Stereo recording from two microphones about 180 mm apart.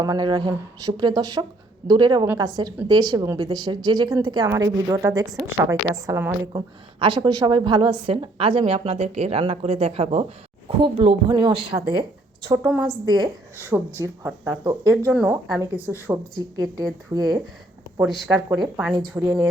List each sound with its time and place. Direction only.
0.0 s speech: 20° right (ahead or behind)
12.5 s speech: 15° right (ahead or behind)
18.0 s speech: centre (ahead or behind)
19.2 s speech: 15° right (ahead or behind)